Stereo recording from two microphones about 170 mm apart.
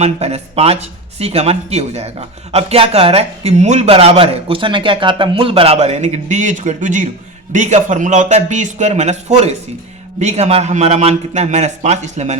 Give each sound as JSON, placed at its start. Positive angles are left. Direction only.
{"t": 0.0, "sound": "a man's voice", "side_deg": -40}